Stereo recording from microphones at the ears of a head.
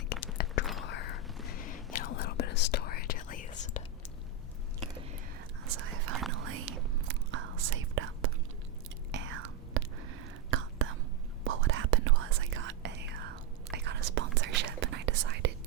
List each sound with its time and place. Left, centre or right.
0.3 s whispering: left
5.6 s whispering: right